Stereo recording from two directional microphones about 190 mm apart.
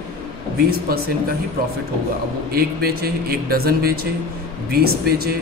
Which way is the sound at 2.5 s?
55° right (ahead or behind).